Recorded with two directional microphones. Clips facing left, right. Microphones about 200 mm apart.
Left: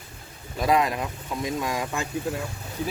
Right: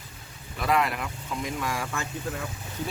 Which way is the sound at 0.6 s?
15° left (ahead or behind).